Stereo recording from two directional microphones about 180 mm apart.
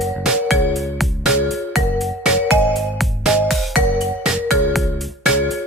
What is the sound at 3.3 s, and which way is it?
Music, centre (ahead or behind).